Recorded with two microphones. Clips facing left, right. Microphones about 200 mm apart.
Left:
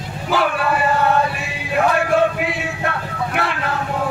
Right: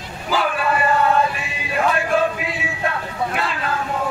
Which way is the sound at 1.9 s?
70° left (ahead or behind).